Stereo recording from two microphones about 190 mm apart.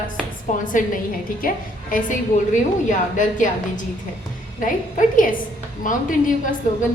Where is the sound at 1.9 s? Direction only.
40° left (ahead or behind).